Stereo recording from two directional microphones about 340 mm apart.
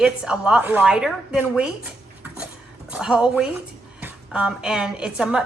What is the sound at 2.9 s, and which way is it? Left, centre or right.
A woman's voice, centre.